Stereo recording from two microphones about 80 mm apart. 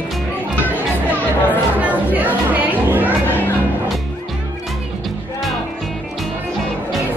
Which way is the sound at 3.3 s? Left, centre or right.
Left.